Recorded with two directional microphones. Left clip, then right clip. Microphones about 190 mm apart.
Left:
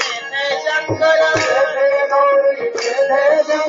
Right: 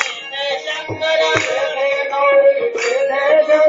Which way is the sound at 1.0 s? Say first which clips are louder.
Left 1 dB; 30° left (ahead or behind).